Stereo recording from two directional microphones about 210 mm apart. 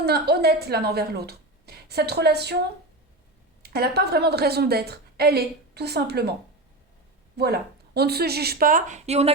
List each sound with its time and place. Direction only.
0.0 s a woman's voice: 50° right (ahead or behind)
3.6 s a woman's voice: 50° right (ahead or behind)
7.3 s a woman's voice: 50° right (ahead or behind); by 9.3 s 30° right (ahead or behind)